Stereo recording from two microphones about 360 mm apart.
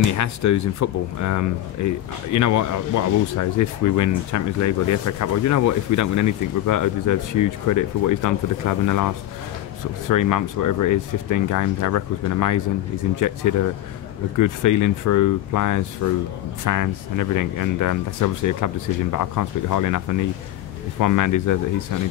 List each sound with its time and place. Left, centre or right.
0.1 s speech: left